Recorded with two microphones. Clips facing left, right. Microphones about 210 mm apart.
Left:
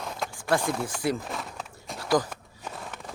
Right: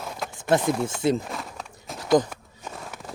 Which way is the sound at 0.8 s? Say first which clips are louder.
Right 5 dB; 25° right (ahead or behind).